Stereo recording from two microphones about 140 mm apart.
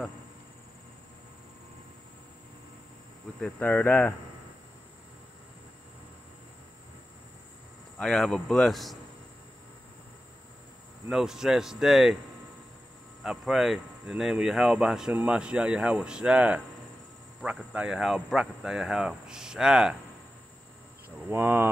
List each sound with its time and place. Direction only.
3.3 s speech: 10° left (ahead or behind)
8.0 s speech: 5° left (ahead or behind)
11.1 s speech: 5° right (ahead or behind)
13.2 s speech: centre (ahead or behind)
21.3 s speech: 15° right (ahead or behind)